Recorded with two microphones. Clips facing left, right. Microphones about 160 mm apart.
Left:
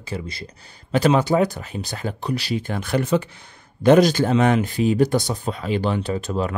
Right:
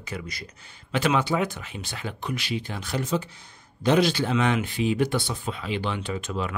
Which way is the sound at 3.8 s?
45° left (ahead or behind).